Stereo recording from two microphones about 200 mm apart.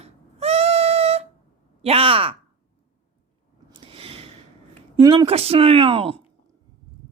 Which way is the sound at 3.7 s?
25° right (ahead or behind).